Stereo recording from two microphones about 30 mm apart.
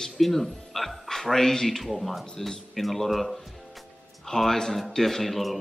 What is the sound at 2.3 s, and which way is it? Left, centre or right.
Speech, centre.